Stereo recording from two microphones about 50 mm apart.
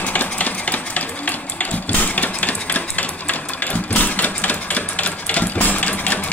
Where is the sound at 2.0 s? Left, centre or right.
Left.